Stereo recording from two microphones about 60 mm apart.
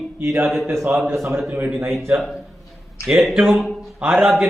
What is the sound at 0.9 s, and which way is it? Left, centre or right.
Speech, right.